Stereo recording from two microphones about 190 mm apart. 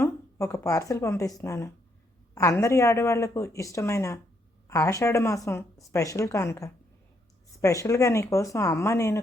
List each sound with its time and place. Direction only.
0.0 s a woman's voice: 15° left (ahead or behind)